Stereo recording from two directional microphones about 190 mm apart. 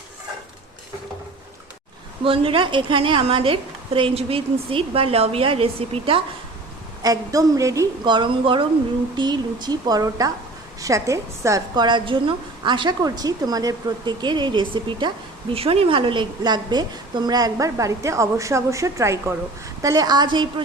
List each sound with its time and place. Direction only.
2.2 s a woman's voice: 30° right (ahead or behind)
7.0 s a woman's voice: 20° right (ahead or behind)